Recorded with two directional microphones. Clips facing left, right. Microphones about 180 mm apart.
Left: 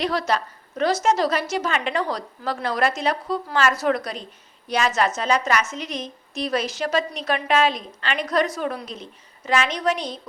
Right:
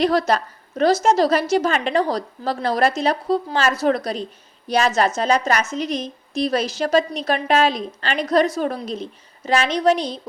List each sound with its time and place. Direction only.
0.0 s a woman's voice: 40° right (ahead or behind)